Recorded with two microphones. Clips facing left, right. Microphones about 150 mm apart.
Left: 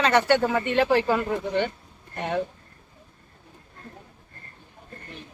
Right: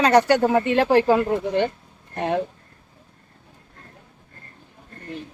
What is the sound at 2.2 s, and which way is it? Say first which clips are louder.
Speech: right 4 dB; 30° right (ahead or behind).